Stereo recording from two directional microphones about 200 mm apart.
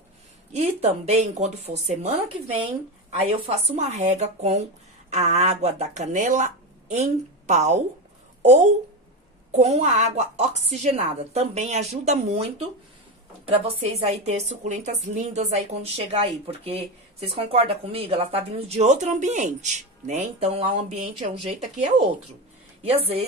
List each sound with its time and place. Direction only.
0.5 s a woman's voice: 35° right (ahead or behind)